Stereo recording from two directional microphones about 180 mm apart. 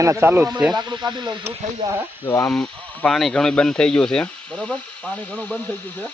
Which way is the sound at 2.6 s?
Centre (ahead or behind).